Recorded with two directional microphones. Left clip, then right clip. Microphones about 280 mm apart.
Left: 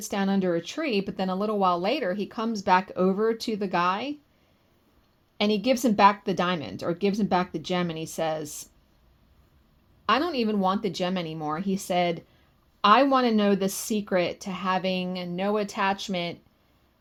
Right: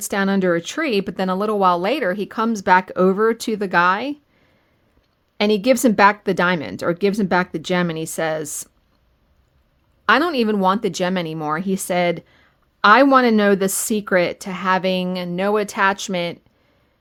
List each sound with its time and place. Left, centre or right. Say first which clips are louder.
0.0 s speech: right 8 dB; right
5.4 s speech: right 8 dB; right
10.1 s speech: right 8 dB; right